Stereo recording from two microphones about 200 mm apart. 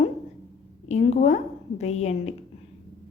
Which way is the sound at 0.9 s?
35° left (ahead or behind).